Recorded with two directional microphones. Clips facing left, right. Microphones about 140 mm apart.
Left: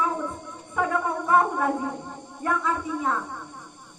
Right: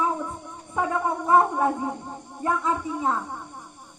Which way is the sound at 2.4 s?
25° right (ahead or behind).